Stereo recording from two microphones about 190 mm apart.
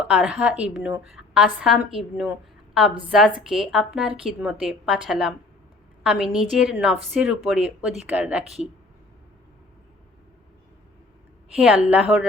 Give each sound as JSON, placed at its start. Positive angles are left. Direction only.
{"t": 0.0, "sound": "a woman's voice", "side_deg": -5}
{"t": 11.5, "sound": "a woman's voice", "side_deg": -5}